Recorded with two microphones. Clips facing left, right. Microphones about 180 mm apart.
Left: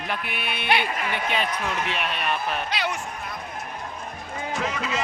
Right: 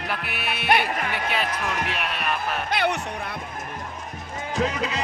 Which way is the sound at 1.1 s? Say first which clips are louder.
Even; 5° right (ahead or behind).